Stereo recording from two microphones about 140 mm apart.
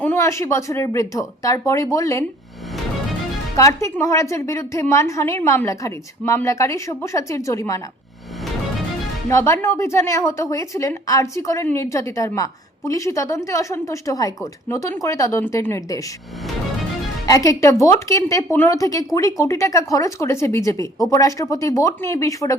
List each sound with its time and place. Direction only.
0.0 s a woman's voice: 15° left (ahead or behind)
3.6 s a woman's voice: 20° left (ahead or behind)
9.3 s a woman's voice: 20° left (ahead or behind)
17.2 s a woman's voice: 25° left (ahead or behind)